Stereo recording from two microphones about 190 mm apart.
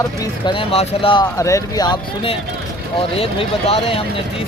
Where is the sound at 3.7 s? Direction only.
30° left (ahead or behind).